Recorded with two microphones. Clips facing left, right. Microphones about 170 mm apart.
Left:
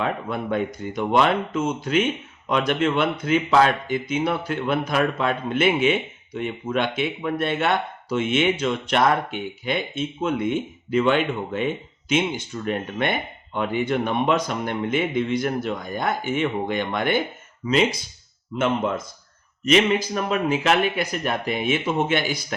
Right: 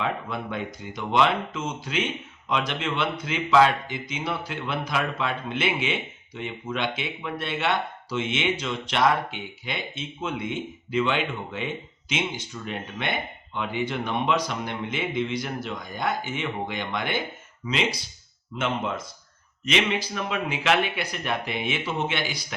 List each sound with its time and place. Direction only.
0.0 s speech: 50° left (ahead or behind)
19.6 s speech: 45° left (ahead or behind)